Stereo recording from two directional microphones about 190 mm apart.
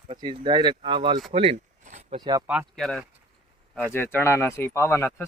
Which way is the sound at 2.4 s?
5° right (ahead or behind).